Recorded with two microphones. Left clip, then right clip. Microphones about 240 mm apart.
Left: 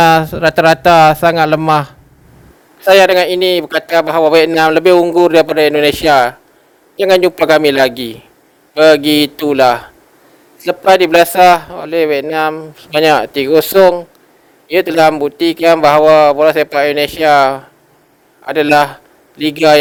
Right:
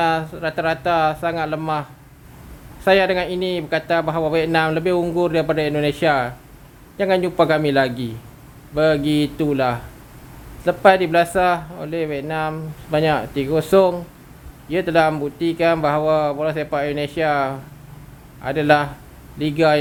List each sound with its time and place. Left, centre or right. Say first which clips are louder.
0.0 s a man's voice: left 11 dB; left